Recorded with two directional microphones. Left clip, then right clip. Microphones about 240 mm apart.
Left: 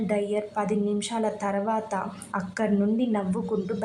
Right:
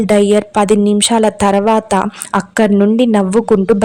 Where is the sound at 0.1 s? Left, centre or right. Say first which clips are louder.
Right 17 dB; right.